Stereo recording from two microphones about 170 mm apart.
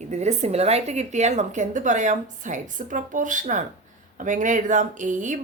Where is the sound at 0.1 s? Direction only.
40° right (ahead or behind).